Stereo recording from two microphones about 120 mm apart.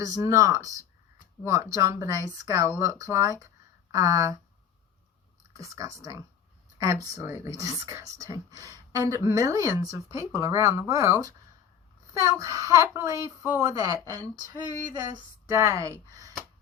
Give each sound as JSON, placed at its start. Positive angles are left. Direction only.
{"t": 0.0, "sound": "speech", "side_deg": -25}
{"t": 5.5, "sound": "speech", "side_deg": -25}